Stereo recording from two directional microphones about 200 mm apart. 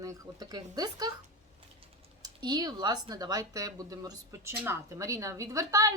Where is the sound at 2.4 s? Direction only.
20° right (ahead or behind).